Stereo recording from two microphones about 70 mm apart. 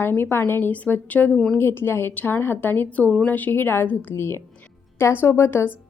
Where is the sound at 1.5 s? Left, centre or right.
Left.